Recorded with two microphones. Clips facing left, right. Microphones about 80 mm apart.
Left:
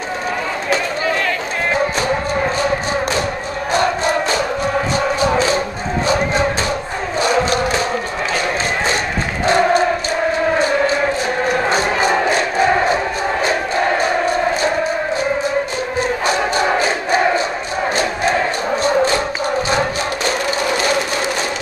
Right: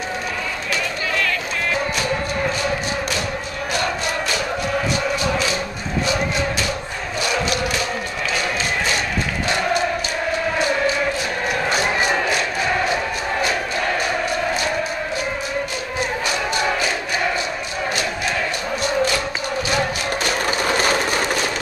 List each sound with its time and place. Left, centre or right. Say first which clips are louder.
3.7 s music: left 7 dB; left
7.2 s crowd: left 6 dB; left
9.5 s choir: left 8 dB; left
11.7 s crowd: left 4 dB; left
16.3 s crowd: left 6 dB; left
18.8 s a sound: left 5 dB; left